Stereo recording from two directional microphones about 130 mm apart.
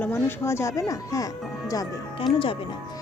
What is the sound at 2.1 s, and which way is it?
Speech, 45° left (ahead or behind).